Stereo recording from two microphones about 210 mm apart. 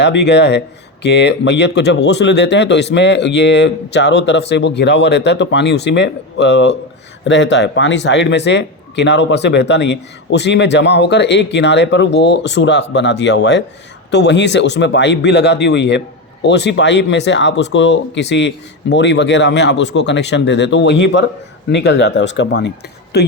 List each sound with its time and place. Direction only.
0.0 s speech: 55° left (ahead or behind)